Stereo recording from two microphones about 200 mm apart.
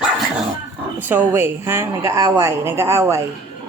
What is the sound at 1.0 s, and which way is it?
A woman's voice, 10° right (ahead or behind).